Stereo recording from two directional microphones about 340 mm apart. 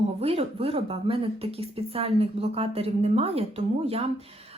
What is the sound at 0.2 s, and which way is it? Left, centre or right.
Speech, centre.